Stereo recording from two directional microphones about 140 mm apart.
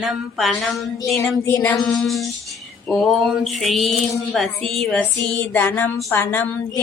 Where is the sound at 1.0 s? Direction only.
20° left (ahead or behind).